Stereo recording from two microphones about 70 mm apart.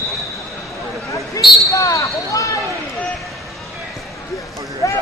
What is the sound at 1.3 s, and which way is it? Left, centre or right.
Basketball bounce, left.